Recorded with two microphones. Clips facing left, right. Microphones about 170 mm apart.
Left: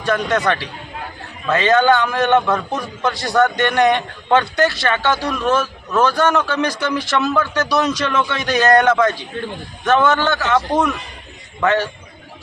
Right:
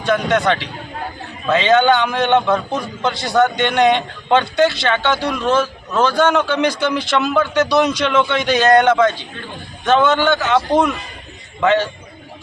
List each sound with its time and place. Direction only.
0.0 s speech: 25° right (ahead or behind)
5.5 s speech: 5° left (ahead or behind)
6.1 s speech: 25° right (ahead or behind)